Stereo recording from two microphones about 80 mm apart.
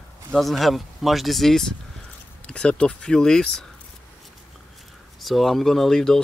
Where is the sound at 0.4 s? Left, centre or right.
Centre.